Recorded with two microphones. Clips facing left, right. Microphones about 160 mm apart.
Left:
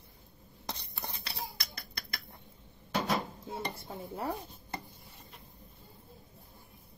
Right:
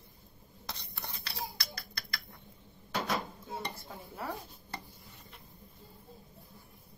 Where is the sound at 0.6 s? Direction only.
20° left (ahead or behind).